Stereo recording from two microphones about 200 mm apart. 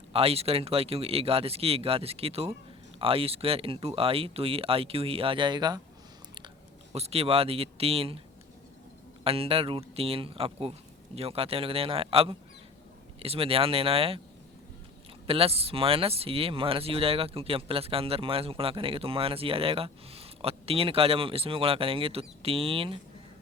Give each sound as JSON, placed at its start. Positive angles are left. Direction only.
{"t": 0.1, "sound": "speech", "side_deg": -30}
{"t": 6.9, "sound": "speech", "side_deg": -30}
{"t": 9.2, "sound": "speech", "side_deg": -30}
{"t": 15.3, "sound": "speech", "side_deg": -30}